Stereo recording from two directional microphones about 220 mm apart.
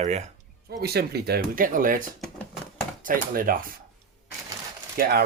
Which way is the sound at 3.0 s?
40° right (ahead or behind).